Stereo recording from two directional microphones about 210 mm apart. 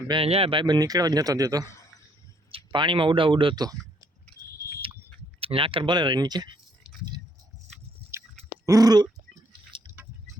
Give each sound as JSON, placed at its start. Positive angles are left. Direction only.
{"t": 0.1, "sound": "speech", "side_deg": -25}
{"t": 5.4, "sound": "speech", "side_deg": -25}
{"t": 8.1, "sound": "chewing", "side_deg": -10}
{"t": 8.6, "sound": "a sound", "side_deg": -15}